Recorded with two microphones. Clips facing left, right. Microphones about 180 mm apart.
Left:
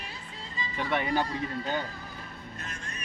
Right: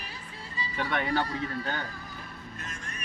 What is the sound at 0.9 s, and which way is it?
Speech, 10° left (ahead or behind).